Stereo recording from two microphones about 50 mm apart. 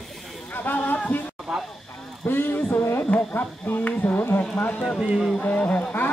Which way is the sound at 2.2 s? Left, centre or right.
Left.